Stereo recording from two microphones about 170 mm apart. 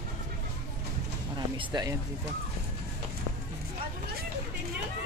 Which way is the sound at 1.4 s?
25° right (ahead or behind).